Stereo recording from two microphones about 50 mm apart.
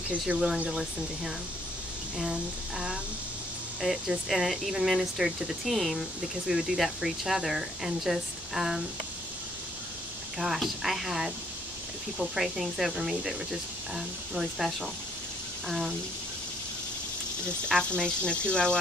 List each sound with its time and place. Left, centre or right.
0.3 s speech: right
0.7 s speech: centre
3.8 s speech: centre
10.4 s speech: centre
17.6 s speech: centre